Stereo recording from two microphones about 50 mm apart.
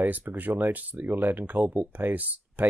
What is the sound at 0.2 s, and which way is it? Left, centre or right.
Speech, right.